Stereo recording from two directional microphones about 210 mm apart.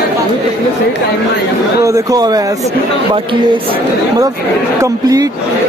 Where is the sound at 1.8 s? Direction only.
15° right (ahead or behind).